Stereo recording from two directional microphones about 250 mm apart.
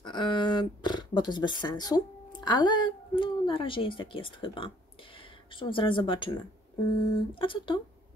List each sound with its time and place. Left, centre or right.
0.0 s a sound: centre
5.6 s speech: left
7.3 s speech: centre